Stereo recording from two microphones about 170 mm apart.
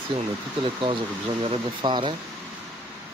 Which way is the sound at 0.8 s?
30° right (ahead or behind).